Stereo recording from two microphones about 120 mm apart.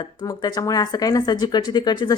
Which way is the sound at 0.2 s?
35° left (ahead or behind).